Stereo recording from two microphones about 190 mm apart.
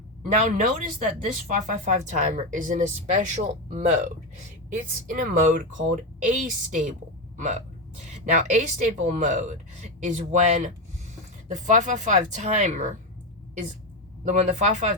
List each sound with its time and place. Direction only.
0.4 s speech: 45° right (ahead or behind)
14.3 s speech: 35° right (ahead or behind)